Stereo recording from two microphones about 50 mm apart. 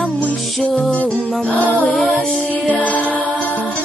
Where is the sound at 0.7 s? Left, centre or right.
Left.